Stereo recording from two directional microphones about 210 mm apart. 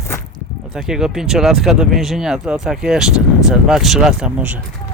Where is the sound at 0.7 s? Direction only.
Centre (ahead or behind).